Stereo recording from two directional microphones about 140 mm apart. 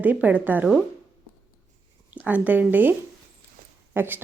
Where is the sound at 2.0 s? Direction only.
10° right (ahead or behind).